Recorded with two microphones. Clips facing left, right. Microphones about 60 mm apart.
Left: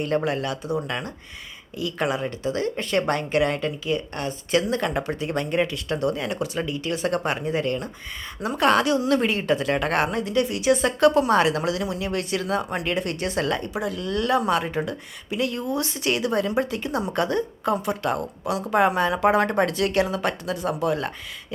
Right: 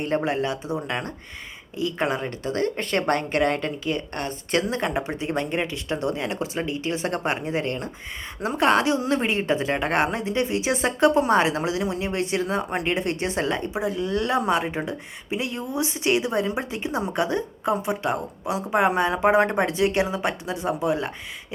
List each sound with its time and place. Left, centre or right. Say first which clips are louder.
0.0 s a woman's voice: even; right
2.1 s speech: left 1 dB; right
4.7 s a woman's voice: left 1 dB; right